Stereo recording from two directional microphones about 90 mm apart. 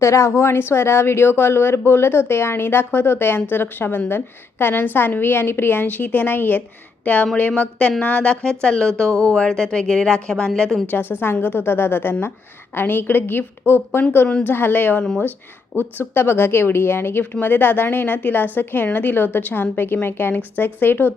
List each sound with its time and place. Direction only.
0.0 s a woman's voice: 30° left (ahead or behind); by 10.8 s 5° left (ahead or behind)
10.9 s a woman's voice: 25° left (ahead or behind)